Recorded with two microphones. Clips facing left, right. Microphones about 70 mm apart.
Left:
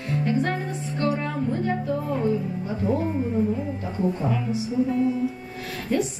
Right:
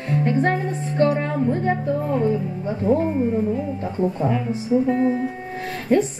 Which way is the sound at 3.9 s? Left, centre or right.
Right.